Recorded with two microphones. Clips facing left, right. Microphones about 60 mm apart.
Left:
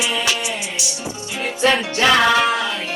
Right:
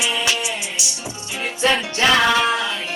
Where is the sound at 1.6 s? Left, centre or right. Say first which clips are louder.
Left 2 dB; left.